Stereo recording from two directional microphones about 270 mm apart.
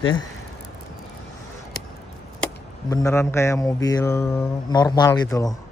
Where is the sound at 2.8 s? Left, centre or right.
Centre.